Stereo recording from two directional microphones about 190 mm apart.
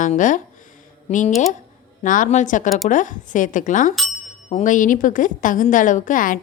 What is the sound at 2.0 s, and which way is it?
Speech, 45° left (ahead or behind).